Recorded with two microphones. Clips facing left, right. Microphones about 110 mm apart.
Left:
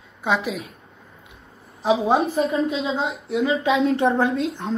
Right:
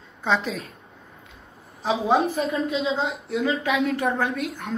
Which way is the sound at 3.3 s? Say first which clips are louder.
Left 4 dB; 25° left (ahead or behind).